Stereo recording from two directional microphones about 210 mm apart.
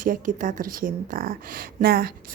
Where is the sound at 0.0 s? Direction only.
40° right (ahead or behind).